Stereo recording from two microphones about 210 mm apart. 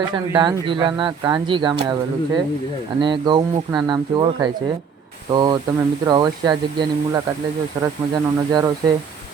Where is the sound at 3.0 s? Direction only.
20° right (ahead or behind).